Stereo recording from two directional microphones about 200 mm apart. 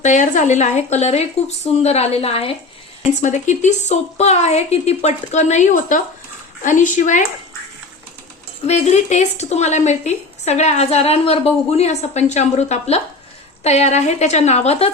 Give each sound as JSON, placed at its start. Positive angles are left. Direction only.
{"t": 0.0, "sound": "a woman's voice", "side_deg": 35}
{"t": 8.6, "sound": "a woman's voice", "side_deg": 35}